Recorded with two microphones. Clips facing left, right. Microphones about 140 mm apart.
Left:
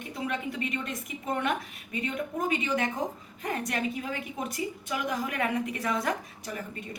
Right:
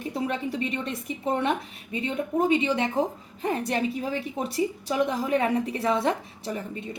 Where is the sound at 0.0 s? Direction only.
30° right (ahead or behind).